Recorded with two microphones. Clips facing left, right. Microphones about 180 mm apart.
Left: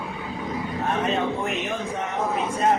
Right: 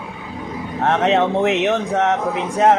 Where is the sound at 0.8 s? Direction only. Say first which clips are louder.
Right 9 dB; 80° right.